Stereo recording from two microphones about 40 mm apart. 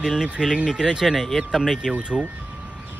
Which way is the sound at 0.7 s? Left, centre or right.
Centre.